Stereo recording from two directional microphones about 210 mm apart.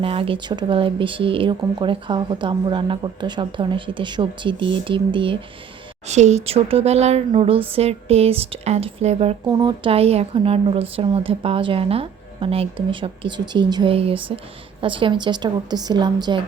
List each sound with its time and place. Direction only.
0.0 s speech: 25° right (ahead or behind)